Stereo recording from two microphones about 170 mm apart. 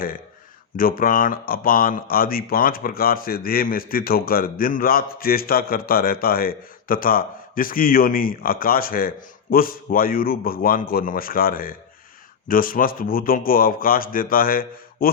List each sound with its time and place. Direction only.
0.8 s speech: 55° left (ahead or behind)